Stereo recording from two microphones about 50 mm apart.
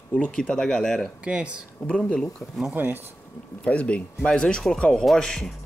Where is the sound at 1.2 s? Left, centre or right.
Right.